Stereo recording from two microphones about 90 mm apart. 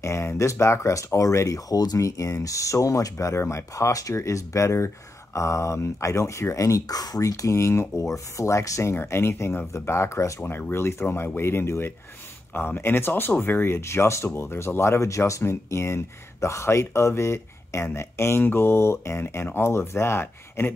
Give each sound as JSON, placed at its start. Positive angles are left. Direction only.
{"t": 0.0, "sound": "speech", "side_deg": 30}